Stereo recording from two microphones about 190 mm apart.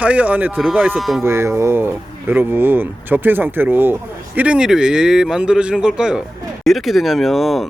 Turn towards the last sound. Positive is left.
turn(degrees=0)  # may be behind; listen again after turning